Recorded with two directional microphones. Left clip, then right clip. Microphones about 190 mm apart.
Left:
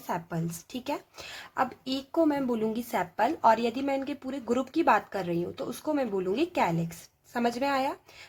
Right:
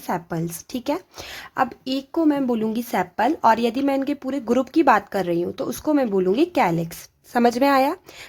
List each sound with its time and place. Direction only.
0.1 s a woman's voice: 35° right (ahead or behind)